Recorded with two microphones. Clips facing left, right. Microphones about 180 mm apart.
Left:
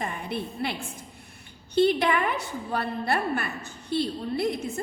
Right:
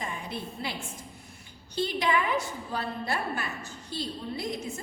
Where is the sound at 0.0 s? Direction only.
60° left (ahead or behind).